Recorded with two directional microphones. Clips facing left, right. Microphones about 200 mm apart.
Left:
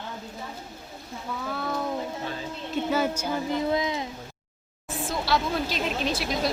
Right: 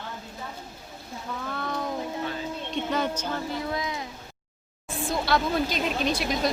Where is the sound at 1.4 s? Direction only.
5° left (ahead or behind); by 4.1 s 20° left (ahead or behind).